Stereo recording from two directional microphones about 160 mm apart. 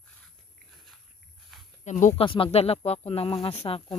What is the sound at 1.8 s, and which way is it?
Speech, 45° left (ahead or behind).